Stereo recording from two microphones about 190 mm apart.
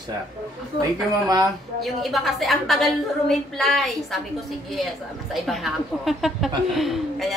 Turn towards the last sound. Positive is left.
turn(degrees=0)  # may be behind; listen again after turning